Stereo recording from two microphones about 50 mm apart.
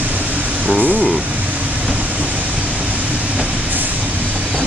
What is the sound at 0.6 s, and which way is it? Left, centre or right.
Speech, right.